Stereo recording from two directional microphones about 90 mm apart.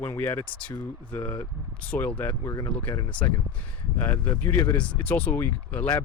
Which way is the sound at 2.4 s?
40° left (ahead or behind).